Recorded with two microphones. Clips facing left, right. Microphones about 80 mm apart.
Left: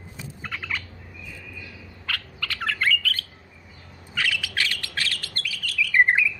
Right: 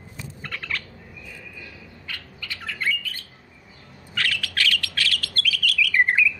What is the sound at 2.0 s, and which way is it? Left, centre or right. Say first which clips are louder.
Bird: left 5 dB; left.